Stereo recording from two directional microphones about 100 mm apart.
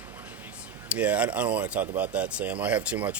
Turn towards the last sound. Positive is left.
turn(degrees=-15)  # may be behind; listen again after turning